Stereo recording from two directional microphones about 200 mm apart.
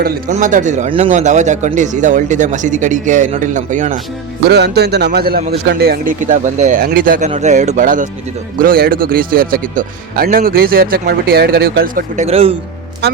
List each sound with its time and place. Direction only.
0.0 s speech: 40° right (ahead or behind)
4.4 s speech: 55° right (ahead or behind)
7.3 s speech: 35° right (ahead or behind)